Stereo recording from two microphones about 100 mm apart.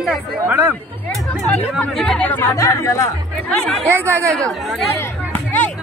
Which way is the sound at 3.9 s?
30° right (ahead or behind).